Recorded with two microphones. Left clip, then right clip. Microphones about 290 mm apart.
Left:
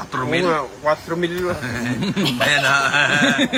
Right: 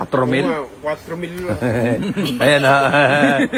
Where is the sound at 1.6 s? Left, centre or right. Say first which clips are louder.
Right 6 dB; centre.